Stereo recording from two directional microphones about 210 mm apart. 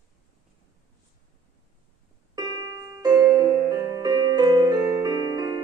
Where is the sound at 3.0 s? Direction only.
15° right (ahead or behind).